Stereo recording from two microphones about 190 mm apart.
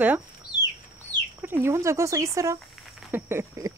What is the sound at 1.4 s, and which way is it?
Speech, 10° right (ahead or behind).